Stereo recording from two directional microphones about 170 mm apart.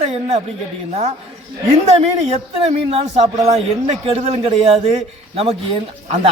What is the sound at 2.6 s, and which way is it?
A man's voice, 35° right (ahead or behind).